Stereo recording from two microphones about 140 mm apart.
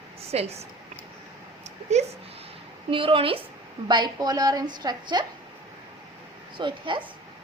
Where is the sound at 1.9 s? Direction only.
50° right (ahead or behind).